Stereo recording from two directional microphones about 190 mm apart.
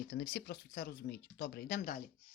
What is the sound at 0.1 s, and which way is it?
Speech, 65° left (ahead or behind).